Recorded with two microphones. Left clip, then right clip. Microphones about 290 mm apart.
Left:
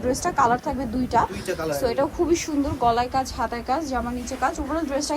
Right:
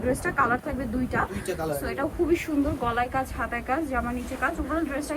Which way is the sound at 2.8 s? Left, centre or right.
Centre.